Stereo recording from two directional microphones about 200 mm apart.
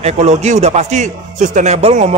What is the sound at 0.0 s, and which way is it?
A man's voice, 35° right (ahead or behind).